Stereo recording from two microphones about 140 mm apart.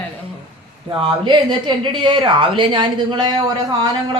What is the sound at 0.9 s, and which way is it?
Speech, 35° right (ahead or behind).